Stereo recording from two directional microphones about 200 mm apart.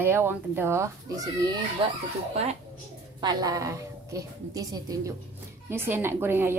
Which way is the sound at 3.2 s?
20° right (ahead or behind).